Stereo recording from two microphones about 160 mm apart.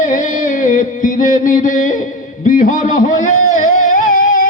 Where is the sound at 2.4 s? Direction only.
60° left (ahead or behind).